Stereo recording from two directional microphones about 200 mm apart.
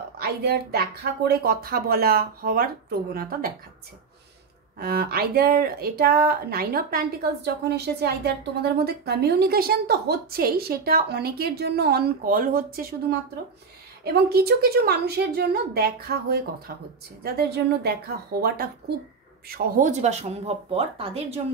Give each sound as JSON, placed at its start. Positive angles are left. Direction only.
{"t": 0.2, "sound": "speech", "side_deg": -50}
{"t": 4.7, "sound": "speech", "side_deg": -50}
{"t": 14.0, "sound": "speech", "side_deg": -50}